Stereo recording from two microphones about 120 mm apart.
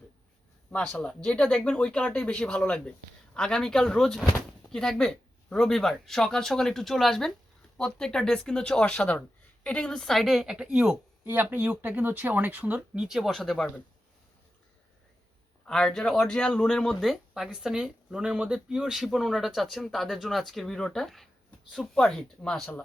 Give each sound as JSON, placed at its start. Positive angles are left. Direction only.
{"t": 0.7, "sound": "a woman's voice", "side_deg": 10}
{"t": 15.6, "sound": "speech", "side_deg": 5}